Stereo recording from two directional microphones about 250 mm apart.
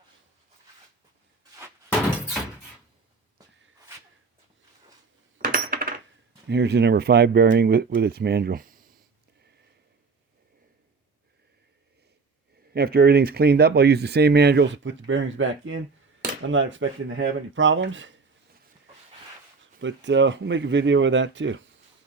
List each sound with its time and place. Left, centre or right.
5.5 s coin: right
6.5 s speech: right
12.7 s speech: right
19.8 s speech: right